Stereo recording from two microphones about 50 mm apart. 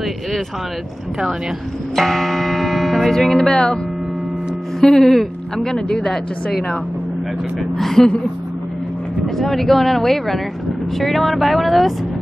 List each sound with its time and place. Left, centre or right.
2.0 s speech: centre
4.7 s speech: centre
7.7 s speech: centre
9.4 s speech: centre